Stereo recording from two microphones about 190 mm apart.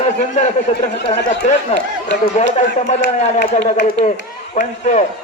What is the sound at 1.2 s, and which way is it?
Speech, 70° left (ahead or behind).